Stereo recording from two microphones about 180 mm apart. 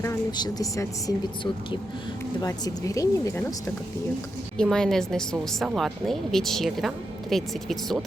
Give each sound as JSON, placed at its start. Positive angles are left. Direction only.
{"t": 0.0, "sound": "speech", "side_deg": 20}
{"t": 2.4, "sound": "speech", "side_deg": 20}
{"t": 4.5, "sound": "speech", "side_deg": 5}